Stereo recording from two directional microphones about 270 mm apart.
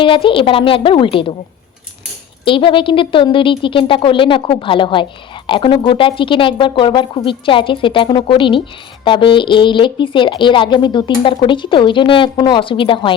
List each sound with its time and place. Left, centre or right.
0.0 s speech: centre
2.4 s a woman's voice: centre